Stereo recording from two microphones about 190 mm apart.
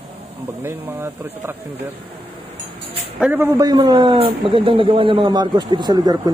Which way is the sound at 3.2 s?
10° right (ahead or behind).